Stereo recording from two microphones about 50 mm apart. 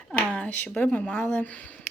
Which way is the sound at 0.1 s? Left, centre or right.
Left.